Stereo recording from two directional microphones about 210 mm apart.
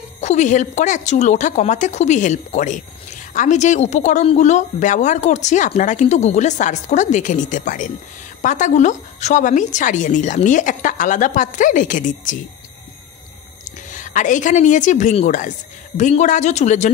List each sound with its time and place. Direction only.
0.2 s a woman's voice: 35° left (ahead or behind)
13.8 s a woman's voice: 35° left (ahead or behind)